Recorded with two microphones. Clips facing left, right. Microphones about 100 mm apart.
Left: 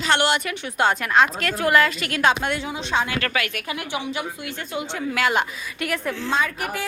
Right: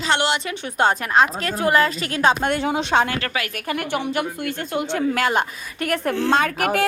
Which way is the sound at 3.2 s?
30° right (ahead or behind).